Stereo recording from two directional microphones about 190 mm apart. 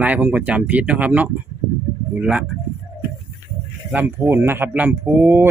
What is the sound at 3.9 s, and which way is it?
Speech, 10° right (ahead or behind).